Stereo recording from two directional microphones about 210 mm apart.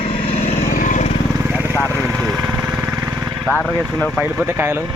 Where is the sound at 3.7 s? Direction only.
15° right (ahead or behind).